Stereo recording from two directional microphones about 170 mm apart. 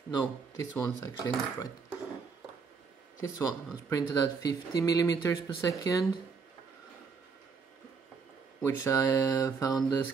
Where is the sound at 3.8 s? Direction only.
20° left (ahead or behind).